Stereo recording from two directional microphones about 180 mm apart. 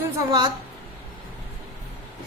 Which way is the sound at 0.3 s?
25° right (ahead or behind).